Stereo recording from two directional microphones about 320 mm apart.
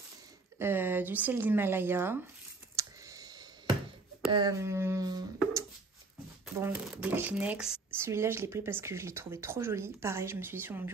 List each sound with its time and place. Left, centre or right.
0.6 s speech: centre
2.7 s clicking: centre
4.3 s speech: centre